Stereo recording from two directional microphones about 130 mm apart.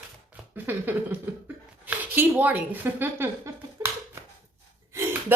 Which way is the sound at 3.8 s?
25° right (ahead or behind).